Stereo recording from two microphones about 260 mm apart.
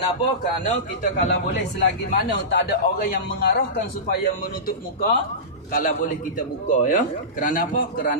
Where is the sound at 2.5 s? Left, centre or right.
Left.